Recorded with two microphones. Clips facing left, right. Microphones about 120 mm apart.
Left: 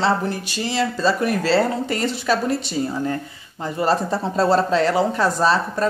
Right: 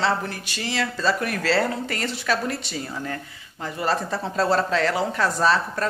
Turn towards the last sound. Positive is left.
turn(degrees=30)  # may be behind; listen again after turning